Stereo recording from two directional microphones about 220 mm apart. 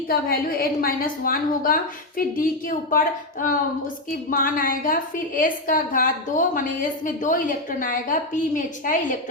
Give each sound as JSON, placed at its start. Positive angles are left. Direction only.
{"t": 0.1, "sound": "a woman's voice", "side_deg": 40}
{"t": 4.3, "sound": "a woman's voice", "side_deg": 40}